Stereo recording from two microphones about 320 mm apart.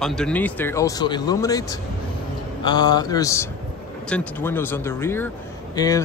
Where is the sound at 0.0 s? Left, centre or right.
Centre.